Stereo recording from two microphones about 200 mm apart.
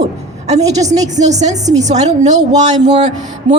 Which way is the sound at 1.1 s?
35° right (ahead or behind).